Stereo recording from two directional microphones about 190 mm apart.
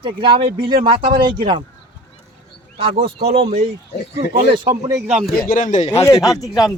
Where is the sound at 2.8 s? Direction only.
30° right (ahead or behind).